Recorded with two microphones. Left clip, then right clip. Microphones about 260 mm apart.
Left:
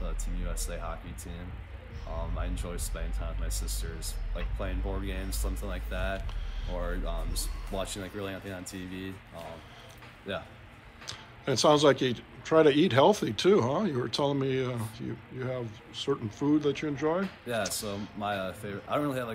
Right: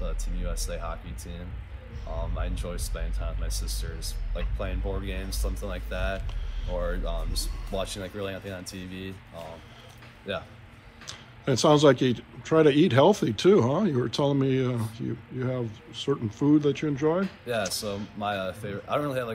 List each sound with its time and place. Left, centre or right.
0.0 s speech: centre
2.0 s speech: centre